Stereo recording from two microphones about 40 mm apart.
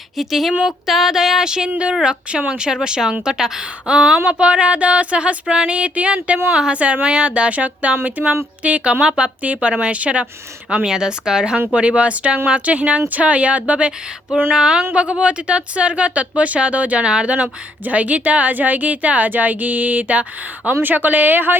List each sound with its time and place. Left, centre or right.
0.2 s speech: centre
0.9 s a sound: centre
1.8 s speech: right
2.7 s a sound: centre
3.2 s speech: centre; by 6.1 s right
6.5 s speech: centre
6.7 s a woman's voice: right
9.4 s a woman's voice: right
10.8 s a sound: centre
11.7 s a woman's voice: right
14.5 s a sound: centre
14.9 s speech: right
17.1 s speech: right
17.3 s a woman's voice: right